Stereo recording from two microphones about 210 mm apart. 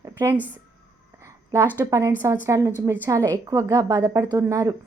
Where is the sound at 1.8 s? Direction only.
15° right (ahead or behind).